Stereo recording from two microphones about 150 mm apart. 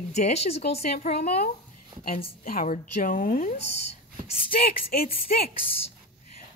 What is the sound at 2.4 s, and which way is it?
A woman's voice, 65° left (ahead or behind).